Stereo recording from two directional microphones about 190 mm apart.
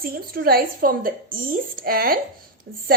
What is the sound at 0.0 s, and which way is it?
A woman's voice, 50° right (ahead or behind).